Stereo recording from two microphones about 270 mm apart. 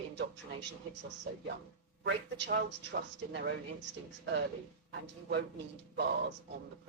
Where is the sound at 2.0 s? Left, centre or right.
Right.